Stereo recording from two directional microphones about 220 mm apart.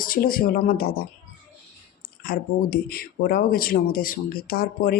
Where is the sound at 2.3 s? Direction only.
45° left (ahead or behind).